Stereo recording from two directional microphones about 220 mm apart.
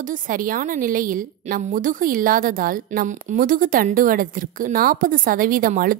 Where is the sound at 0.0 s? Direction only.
40° right (ahead or behind).